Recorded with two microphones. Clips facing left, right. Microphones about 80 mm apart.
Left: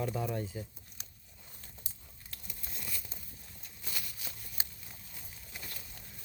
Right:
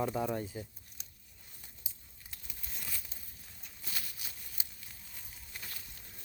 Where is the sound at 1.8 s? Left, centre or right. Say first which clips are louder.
Left 2 dB; centre.